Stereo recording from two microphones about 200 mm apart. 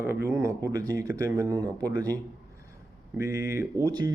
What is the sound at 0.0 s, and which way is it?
Speech, 15° right (ahead or behind).